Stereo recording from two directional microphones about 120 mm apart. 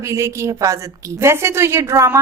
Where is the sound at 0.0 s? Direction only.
25° right (ahead or behind).